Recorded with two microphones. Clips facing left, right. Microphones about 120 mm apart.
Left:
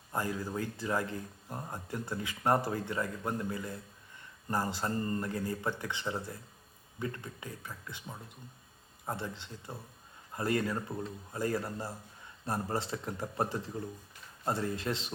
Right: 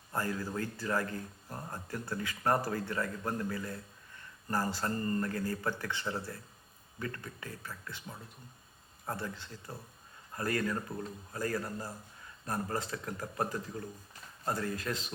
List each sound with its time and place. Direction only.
0.1 s a man's voice: 15° left (ahead or behind)